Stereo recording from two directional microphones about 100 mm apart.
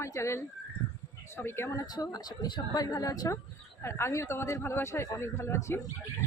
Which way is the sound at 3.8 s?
25° left (ahead or behind).